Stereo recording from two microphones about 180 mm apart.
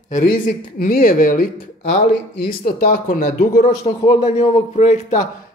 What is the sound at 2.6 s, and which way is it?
Speech, 55° left (ahead or behind).